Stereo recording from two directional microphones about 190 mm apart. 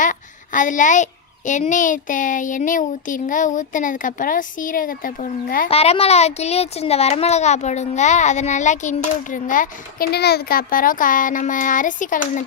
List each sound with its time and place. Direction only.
0.0 s a sound: 45° left (ahead or behind)
1.5 s speech: 40° left (ahead or behind)
5.6 s a child's voice: 30° left (ahead or behind)